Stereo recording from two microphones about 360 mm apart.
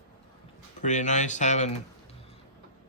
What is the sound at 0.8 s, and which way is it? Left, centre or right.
Speech, centre.